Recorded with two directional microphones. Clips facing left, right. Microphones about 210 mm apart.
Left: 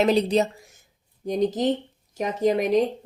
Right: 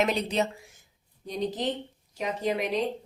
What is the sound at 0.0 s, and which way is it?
A woman's voice, 35° left (ahead or behind).